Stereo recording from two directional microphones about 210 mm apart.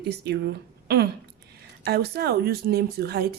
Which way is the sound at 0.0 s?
50° right (ahead or behind).